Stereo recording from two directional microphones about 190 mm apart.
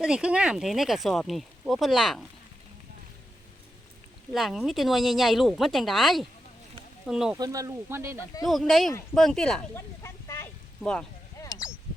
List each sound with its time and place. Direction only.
0.0 s speech: 5° right (ahead or behind)
4.3 s speech: centre (ahead or behind)
7.3 s speech: 20° right (ahead or behind)
8.4 s speech: centre (ahead or behind)
10.0 s a sound: 15° left (ahead or behind)
11.4 s sheep: 15° left (ahead or behind)